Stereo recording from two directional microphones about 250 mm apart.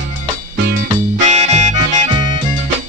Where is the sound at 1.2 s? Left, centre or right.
Right.